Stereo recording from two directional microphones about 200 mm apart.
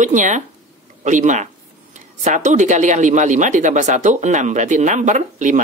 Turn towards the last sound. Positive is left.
turn(degrees=-40)  # may be behind; listen again after turning